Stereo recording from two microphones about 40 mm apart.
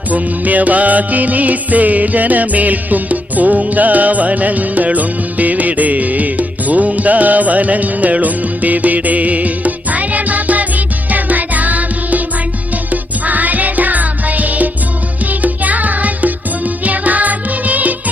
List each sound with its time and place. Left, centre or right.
0.1 s music: right